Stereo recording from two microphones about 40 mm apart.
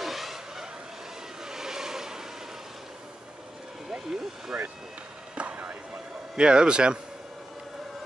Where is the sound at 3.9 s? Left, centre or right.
Centre.